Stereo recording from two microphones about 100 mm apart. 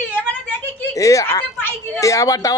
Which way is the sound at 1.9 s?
35° left (ahead or behind).